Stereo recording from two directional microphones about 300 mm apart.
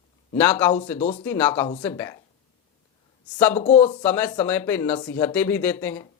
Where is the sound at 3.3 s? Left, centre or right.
Centre.